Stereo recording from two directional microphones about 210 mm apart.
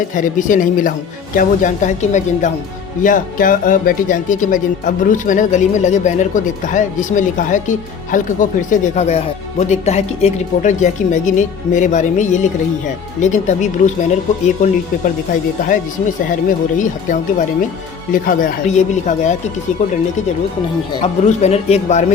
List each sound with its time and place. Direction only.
0.2 s speech: 40° left (ahead or behind)
21.2 s speech: 30° left (ahead or behind)